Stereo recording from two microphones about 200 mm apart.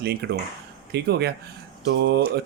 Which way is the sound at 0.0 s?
55° right (ahead or behind).